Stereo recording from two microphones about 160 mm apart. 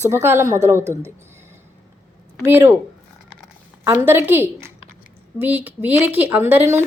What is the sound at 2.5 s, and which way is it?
Speech, 15° right (ahead or behind).